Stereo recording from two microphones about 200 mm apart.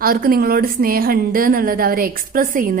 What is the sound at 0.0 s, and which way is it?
A woman's voice, 45° right (ahead or behind).